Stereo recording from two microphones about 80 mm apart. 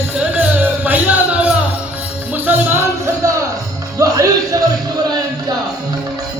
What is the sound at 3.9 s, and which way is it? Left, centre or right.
Music, right.